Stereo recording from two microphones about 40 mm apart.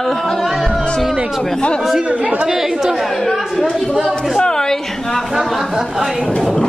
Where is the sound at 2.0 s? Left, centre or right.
Right.